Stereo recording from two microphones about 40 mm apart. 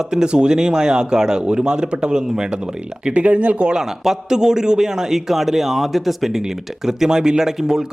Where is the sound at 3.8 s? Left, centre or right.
Centre.